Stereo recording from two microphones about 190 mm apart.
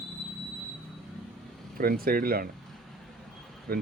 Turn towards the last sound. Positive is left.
turn(degrees=-55)  # may be behind; listen again after turning